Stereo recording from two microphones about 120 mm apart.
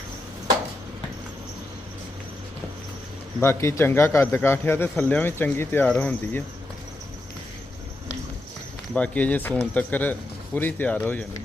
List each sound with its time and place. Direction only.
3.4 s a man's voice: 20° left (ahead or behind)
9.0 s speech: 10° left (ahead or behind)